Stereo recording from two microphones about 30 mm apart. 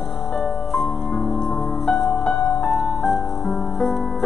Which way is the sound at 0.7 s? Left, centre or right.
Centre.